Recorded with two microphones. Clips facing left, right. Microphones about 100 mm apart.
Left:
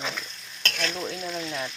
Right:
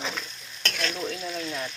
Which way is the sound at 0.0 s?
5° right (ahead or behind).